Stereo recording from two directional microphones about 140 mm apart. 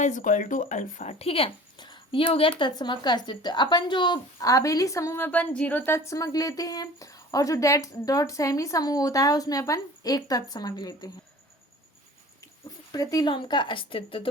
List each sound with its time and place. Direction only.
0.0 s speech: 65° left (ahead or behind)
1.2 s a woman's voice: 40° left (ahead or behind); by 11.1 s 25° left (ahead or behind)
12.9 s speech: 25° left (ahead or behind)